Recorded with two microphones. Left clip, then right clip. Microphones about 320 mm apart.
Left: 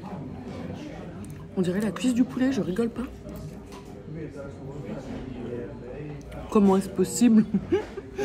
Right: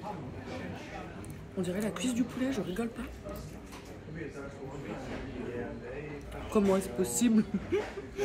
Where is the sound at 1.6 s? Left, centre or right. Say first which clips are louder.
Left 7 dB; centre.